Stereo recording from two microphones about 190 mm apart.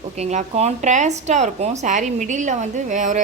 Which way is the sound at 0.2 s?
35° right (ahead or behind).